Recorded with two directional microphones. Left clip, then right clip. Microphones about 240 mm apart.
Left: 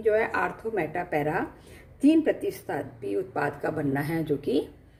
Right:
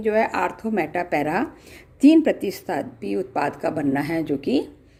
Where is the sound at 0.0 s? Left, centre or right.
Right.